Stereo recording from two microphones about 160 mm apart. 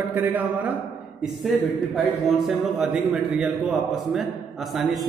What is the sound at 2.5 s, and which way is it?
A man's voice, centre (ahead or behind).